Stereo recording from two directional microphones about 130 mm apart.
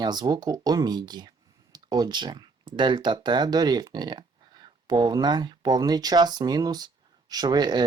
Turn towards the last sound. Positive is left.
turn(degrees=-35)  # may be behind; listen again after turning